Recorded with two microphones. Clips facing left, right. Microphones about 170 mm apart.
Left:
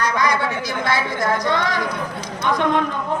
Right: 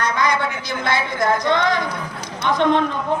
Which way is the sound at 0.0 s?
25° right (ahead or behind).